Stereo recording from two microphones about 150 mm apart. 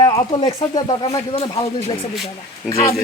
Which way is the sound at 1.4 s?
40° left (ahead or behind).